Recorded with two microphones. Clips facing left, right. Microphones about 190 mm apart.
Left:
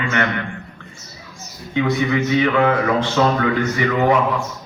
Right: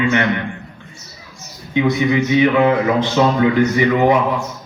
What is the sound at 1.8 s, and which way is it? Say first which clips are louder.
A man's voice: right 3 dB; 15° right (ahead or behind).